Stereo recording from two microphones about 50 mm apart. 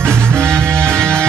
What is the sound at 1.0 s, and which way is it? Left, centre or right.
Music, centre.